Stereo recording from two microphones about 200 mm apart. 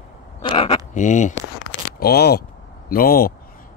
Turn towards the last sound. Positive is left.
turn(degrees=50)  # may be behind; listen again after turning